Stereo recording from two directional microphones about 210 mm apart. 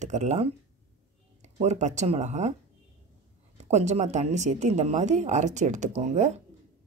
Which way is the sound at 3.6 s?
35° right (ahead or behind).